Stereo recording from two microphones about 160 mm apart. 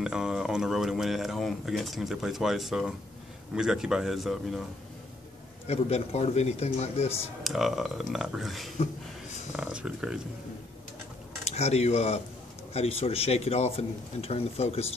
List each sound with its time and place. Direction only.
0.0 s speech: 5° right (ahead or behind)
5.7 s speech: 40° left (ahead or behind)
7.4 s speech: centre (ahead or behind)
11.4 s speech: 40° left (ahead or behind)